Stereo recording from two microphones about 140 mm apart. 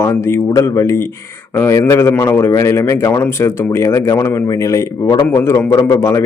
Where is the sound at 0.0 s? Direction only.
25° left (ahead or behind).